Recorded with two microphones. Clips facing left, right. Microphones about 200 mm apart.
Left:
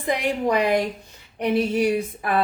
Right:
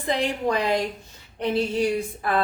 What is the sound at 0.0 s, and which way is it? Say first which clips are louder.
Speech: left 1 dB; 15° left (ahead or behind).